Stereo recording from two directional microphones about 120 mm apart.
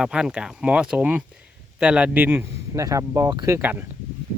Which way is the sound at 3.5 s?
15° right (ahead or behind).